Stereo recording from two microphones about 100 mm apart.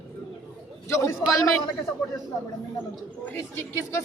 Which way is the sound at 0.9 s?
30° left (ahead or behind).